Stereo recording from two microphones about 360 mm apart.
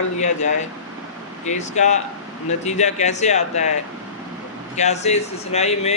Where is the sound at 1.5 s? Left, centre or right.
Centre.